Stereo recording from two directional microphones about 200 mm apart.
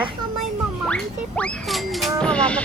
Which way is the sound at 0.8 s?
5° left (ahead or behind).